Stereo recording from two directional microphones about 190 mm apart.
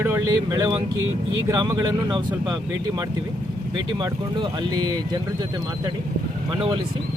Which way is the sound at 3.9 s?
25° right (ahead or behind).